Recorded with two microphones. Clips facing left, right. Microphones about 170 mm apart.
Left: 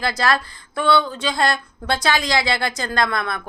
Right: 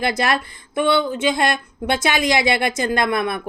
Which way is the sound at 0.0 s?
25° right (ahead or behind).